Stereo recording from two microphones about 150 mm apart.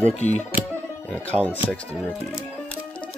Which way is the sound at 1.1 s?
10° left (ahead or behind).